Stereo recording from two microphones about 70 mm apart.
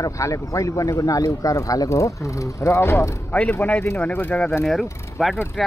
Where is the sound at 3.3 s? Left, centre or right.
Left.